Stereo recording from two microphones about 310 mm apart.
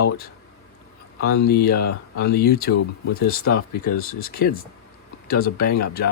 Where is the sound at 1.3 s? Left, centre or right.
Left.